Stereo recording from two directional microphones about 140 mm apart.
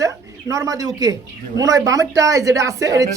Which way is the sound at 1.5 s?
25° right (ahead or behind).